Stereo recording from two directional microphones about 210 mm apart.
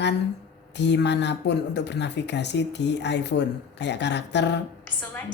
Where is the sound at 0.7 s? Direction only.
55° left (ahead or behind).